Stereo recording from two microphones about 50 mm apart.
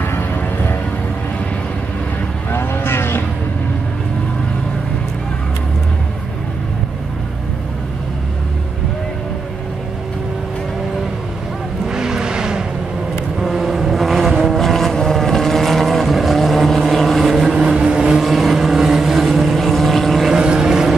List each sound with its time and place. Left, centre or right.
2.5 s vehicle: left
11.9 s vehicle: centre
13.4 s vehicle: centre
17.6 s vehicle: centre
18.2 s vehicle: centre
20.3 s vehicle: centre